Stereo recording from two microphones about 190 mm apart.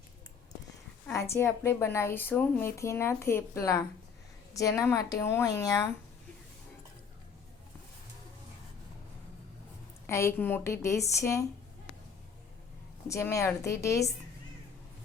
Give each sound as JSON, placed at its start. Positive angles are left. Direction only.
{"t": 1.0, "sound": "a woman's voice", "side_deg": 15}
{"t": 10.1, "sound": "a woman's voice", "side_deg": 15}
{"t": 13.1, "sound": "a woman's voice", "side_deg": 15}